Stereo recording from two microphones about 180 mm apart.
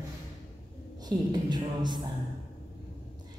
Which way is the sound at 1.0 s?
25° right (ahead or behind).